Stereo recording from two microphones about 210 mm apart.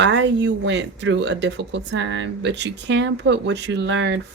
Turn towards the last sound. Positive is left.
turn(degrees=-60)  # may be behind; listen again after turning